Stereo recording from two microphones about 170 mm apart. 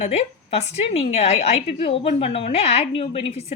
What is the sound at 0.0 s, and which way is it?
A woman's voice, 40° left (ahead or behind).